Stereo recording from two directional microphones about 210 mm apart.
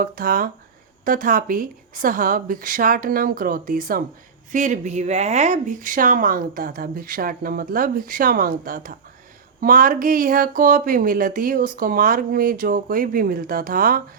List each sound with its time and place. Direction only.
0.0 s speech: 40° right (ahead or behind)